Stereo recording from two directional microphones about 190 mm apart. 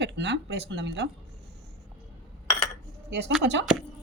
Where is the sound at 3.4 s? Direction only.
70° right (ahead or behind).